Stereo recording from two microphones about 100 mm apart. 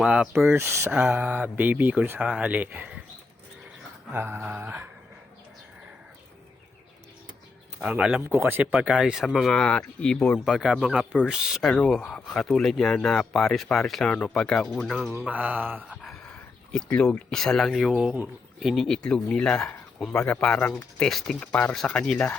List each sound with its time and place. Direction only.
0.0 s speech: 5° right (ahead or behind)
0.3 s speech: 25° right (ahead or behind)
4.1 s speech: 25° right (ahead or behind)
7.8 s speech: 10° right (ahead or behind)
8.3 s speech: 25° right (ahead or behind)
8.7 s speech: 10° right (ahead or behind)
9.2 s speech: 5° left (ahead or behind)
10.4 s speech: 5° right (ahead or behind)
11.7 s speech: 5° left (ahead or behind)
15.2 s speech: 15° right (ahead or behind)
16.0 s a sound: centre (ahead or behind)
16.7 s speech: 10° left (ahead or behind)